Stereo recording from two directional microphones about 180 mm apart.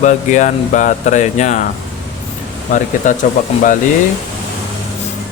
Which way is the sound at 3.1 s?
45° left (ahead or behind).